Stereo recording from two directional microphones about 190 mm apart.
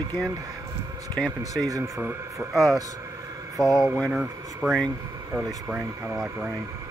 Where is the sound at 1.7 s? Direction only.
10° right (ahead or behind).